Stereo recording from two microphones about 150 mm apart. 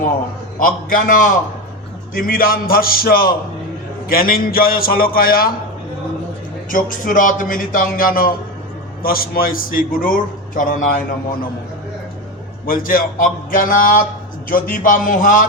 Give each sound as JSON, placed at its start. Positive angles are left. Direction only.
{"t": 0.6, "sound": "a man's voice", "side_deg": 70}
{"t": 6.7, "sound": "speech", "side_deg": 65}
{"t": 12.6, "sound": "speech", "side_deg": 70}